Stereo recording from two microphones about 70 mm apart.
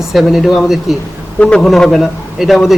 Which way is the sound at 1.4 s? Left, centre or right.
Centre.